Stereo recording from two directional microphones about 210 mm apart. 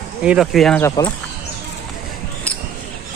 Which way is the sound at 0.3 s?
Centre (ahead or behind).